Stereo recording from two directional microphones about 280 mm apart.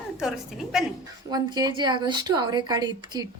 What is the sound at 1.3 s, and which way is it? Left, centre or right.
A woman's voice, centre.